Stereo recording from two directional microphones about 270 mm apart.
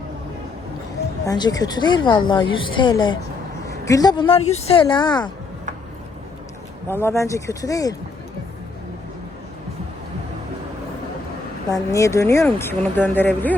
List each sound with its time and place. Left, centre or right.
1.2 s a woman's voice: centre
6.8 s a woman's voice: centre
11.7 s a woman's voice: centre